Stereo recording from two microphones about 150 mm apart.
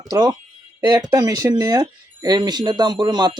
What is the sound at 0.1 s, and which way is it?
Speech, 25° right (ahead or behind).